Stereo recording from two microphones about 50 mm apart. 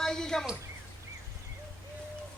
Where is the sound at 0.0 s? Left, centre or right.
Centre.